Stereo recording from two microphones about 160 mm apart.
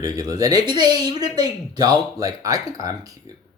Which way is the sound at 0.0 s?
20° right (ahead or behind).